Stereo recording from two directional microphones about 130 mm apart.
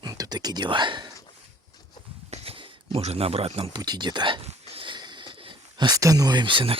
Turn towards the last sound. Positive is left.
turn(degrees=-40)  # may be behind; listen again after turning